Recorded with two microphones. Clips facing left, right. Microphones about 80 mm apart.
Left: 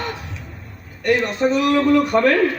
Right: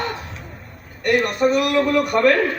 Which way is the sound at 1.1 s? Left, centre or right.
Right.